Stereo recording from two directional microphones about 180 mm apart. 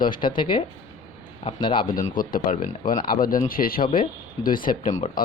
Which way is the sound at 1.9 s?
50° left (ahead or behind).